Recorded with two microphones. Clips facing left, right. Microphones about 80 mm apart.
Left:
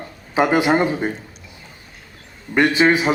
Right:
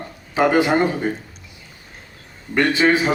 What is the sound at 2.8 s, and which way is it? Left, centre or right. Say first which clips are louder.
Speech: left 1 dB; left.